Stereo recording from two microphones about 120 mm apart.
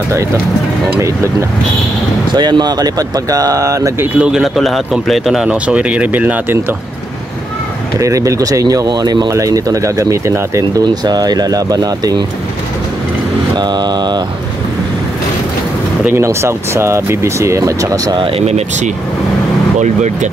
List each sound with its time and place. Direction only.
2.3 s speech: 35° right (ahead or behind)
4.0 s speech: 5° right (ahead or behind)
8.0 s speech: 25° right (ahead or behind)
16.1 s speech: 20° right (ahead or behind)